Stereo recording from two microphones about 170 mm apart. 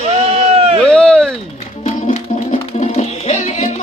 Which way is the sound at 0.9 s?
5° left (ahead or behind).